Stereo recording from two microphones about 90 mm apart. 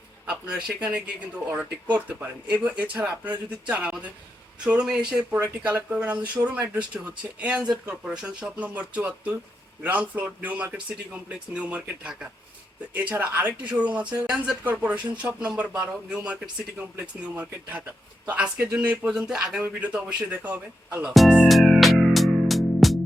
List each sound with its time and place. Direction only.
0.3 s speech: 10° right (ahead or behind)
5.4 s speech: 20° right (ahead or behind)
21.1 s music: centre (ahead or behind)